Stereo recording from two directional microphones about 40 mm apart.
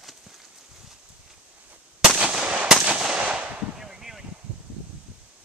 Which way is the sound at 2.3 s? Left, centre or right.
Centre.